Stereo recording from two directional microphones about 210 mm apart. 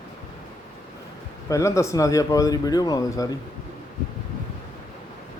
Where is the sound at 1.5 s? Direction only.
15° left (ahead or behind).